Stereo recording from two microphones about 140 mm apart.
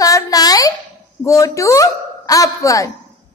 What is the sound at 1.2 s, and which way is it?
Speech, 20° left (ahead or behind).